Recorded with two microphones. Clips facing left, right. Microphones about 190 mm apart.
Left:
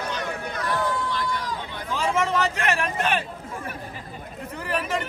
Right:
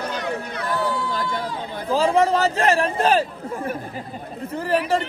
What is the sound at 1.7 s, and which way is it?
A man's voice, 35° right (ahead or behind).